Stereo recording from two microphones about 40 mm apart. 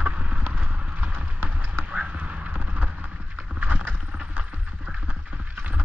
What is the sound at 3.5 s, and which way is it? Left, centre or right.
Vehicle, right.